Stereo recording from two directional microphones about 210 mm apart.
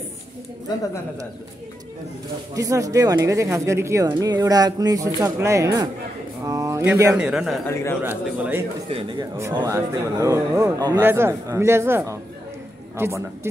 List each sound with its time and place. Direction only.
2.5 s a man's voice: 15° right (ahead or behind)